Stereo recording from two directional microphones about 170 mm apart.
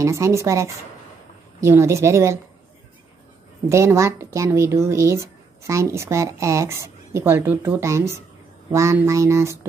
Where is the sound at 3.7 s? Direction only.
15° right (ahead or behind).